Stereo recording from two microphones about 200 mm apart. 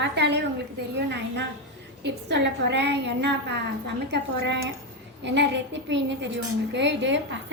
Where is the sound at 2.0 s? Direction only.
60° right (ahead or behind).